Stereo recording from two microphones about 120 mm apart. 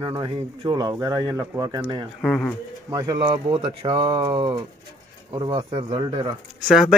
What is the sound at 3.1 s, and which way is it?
Speech, 45° right (ahead or behind).